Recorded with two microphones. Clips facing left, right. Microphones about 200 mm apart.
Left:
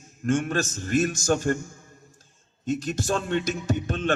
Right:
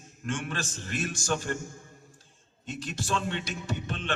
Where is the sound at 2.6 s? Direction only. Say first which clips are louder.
Left 9 dB; 45° left (ahead or behind).